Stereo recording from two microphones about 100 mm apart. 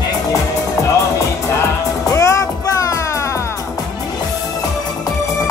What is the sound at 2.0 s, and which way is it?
Music, 30° left (ahead or behind).